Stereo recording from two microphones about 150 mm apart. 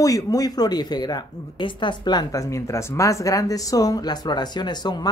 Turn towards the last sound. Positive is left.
turn(degrees=25)  # may be behind; listen again after turning